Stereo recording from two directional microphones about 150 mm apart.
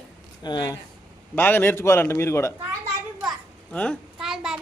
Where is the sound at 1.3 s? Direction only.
15° left (ahead or behind).